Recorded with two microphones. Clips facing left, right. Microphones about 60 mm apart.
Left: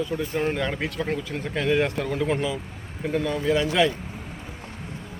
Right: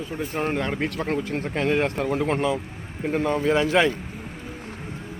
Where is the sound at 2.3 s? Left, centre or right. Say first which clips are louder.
Right 3 dB; right.